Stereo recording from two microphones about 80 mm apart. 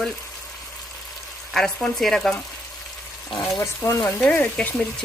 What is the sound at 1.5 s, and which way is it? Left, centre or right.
Speech, centre.